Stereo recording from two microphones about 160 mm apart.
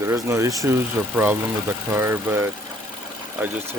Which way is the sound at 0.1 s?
20° right (ahead or behind).